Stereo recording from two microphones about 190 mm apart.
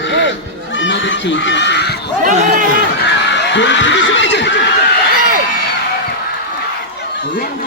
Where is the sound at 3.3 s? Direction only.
70° left (ahead or behind).